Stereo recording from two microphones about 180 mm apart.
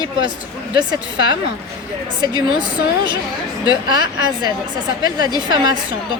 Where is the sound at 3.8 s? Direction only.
25° right (ahead or behind).